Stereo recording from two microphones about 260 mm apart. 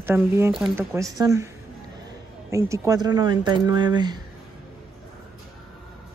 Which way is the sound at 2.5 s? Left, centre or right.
Centre.